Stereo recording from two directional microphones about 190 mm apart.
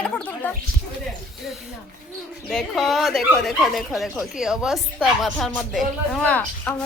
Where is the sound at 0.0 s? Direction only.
10° left (ahead or behind).